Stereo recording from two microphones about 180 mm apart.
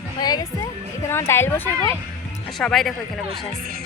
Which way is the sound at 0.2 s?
20° left (ahead or behind).